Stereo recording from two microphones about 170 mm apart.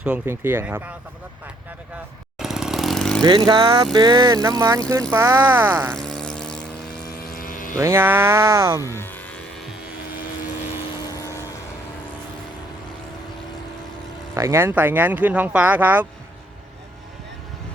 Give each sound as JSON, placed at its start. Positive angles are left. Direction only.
{"t": 0.0, "sound": "speech", "side_deg": -10}
{"t": 2.4, "sound": "motorcycle", "side_deg": -5}
{"t": 3.2, "sound": "speech", "side_deg": -25}
{"t": 5.9, "sound": "a sound", "side_deg": 5}
{"t": 7.2, "sound": "vehicle", "side_deg": 55}
{"t": 7.8, "sound": "speech", "side_deg": -15}
{"t": 8.8, "sound": "vehicle", "side_deg": 15}
{"t": 14.3, "sound": "speech", "side_deg": -15}